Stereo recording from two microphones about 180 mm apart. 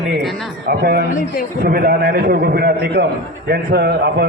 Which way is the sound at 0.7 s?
60° right (ahead or behind).